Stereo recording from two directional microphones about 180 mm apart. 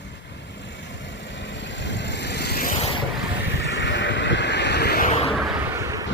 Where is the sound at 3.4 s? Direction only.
75° left (ahead or behind); by 5.1 s 60° left (ahead or behind).